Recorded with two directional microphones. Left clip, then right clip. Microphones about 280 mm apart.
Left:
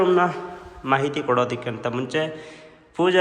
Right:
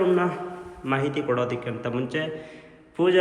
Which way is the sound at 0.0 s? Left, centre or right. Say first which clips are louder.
Left 4 dB; centre.